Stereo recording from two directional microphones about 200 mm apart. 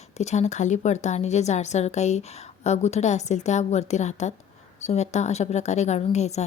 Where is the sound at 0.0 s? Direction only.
35° left (ahead or behind).